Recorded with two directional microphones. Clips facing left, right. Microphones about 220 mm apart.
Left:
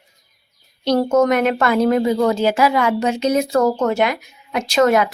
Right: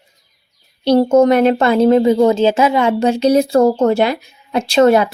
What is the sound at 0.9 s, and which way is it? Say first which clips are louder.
A woman's voice: right 5 dB; 30° right (ahead or behind).